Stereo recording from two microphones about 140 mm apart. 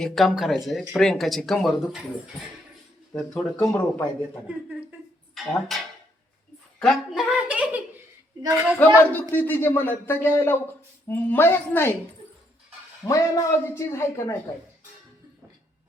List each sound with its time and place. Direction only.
0.0 s speech: centre (ahead or behind)
3.2 s speech: 5° left (ahead or behind)
5.3 s speech: centre (ahead or behind)
8.8 s speech: 10° left (ahead or behind)
13.1 s a man's voice: 25° left (ahead or behind)